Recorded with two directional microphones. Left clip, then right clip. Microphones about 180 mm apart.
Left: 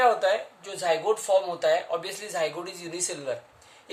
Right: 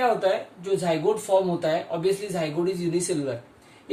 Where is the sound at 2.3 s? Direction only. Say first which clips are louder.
Right 3 dB; 40° left (ahead or behind).